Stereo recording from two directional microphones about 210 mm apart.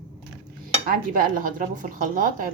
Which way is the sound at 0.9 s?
40° right (ahead or behind).